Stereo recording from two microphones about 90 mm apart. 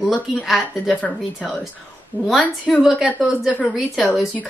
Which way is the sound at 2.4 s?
15° left (ahead or behind).